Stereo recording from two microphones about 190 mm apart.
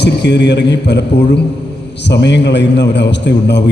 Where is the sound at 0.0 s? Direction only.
65° left (ahead or behind).